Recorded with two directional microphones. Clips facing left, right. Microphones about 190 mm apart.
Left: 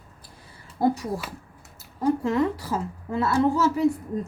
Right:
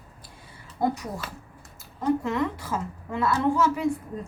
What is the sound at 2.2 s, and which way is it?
A woman's voice, 35° left (ahead or behind).